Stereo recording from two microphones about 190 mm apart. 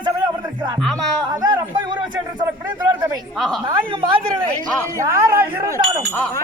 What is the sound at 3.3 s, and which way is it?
Speech, 5° left (ahead or behind).